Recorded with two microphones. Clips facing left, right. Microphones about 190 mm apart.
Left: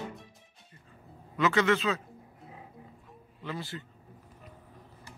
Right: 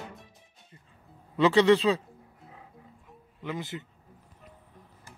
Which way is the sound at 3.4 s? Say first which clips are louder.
Right 3 dB; 20° right (ahead or behind).